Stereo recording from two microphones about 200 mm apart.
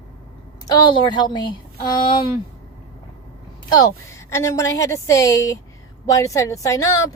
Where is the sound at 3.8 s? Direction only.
15° left (ahead or behind).